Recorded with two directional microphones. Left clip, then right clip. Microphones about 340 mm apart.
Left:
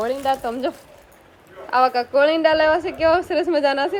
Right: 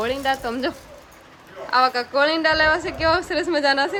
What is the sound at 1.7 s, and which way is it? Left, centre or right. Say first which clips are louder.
A woman's voice: left 2 dB; centre.